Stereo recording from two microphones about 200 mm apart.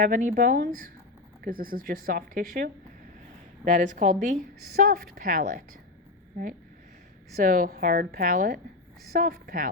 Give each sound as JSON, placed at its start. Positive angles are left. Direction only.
{"t": 0.0, "sound": "a woman's voice", "side_deg": -45}